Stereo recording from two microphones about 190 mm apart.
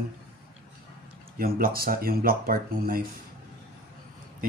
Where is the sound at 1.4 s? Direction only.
50° right (ahead or behind).